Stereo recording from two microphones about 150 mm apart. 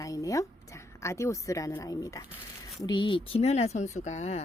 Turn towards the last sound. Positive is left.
turn(degrees=50)  # may be behind; listen again after turning